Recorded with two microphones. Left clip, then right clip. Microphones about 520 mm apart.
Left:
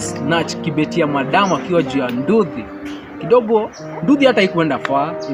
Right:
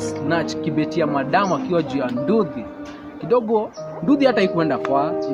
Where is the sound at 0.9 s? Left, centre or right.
Right.